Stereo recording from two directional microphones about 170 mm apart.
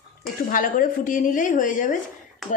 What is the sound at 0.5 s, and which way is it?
A woman's voice, 50° left (ahead or behind).